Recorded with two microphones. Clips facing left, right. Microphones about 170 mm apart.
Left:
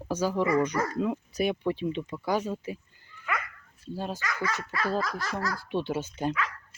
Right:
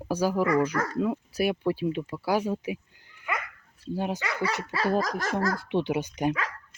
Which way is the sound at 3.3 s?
15° right (ahead or behind).